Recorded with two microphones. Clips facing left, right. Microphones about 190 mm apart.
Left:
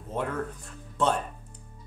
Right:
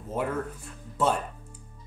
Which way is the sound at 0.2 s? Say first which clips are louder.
Right 1 dB; 5° right (ahead or behind).